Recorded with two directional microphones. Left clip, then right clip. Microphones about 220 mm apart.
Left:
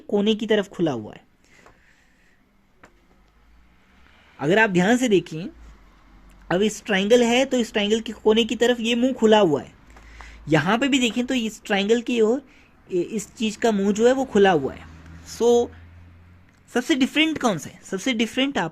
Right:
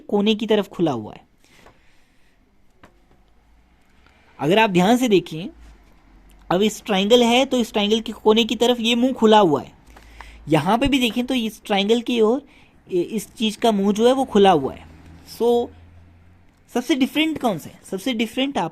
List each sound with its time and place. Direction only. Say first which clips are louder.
0.3 s a woman's voice: right 2 dB; 25° right (ahead or behind)
4.4 s speech: right 2 dB; 20° right (ahead or behind)
4.8 s speech: right 2 dB; 35° right (ahead or behind)
5.1 s a woman's voice: right 2 dB; 20° right (ahead or behind)
6.5 s a woman's voice: right 2 dB; 30° right (ahead or behind)
6.8 s a woman's voice: right 1 dB; 20° right (ahead or behind)
7.4 s speech: right 2 dB; 35° right (ahead or behind)
9.0 s a woman's voice: right 2 dB; 20° right (ahead or behind)
9.2 s speech: right 3 dB; 35° right (ahead or behind)
10.1 s a woman's voice: right 1 dB; 15° right (ahead or behind)